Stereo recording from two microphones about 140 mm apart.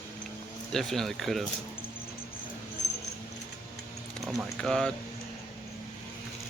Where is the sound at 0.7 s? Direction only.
Centre (ahead or behind).